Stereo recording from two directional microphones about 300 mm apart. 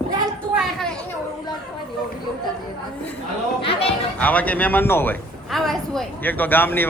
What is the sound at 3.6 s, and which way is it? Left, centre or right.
Chatter, centre.